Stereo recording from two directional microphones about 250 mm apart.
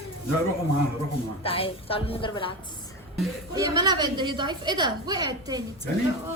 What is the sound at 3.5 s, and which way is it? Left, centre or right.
A woman's voice, centre.